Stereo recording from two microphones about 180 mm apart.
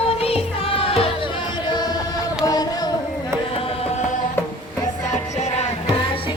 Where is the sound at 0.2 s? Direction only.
30° left (ahead or behind).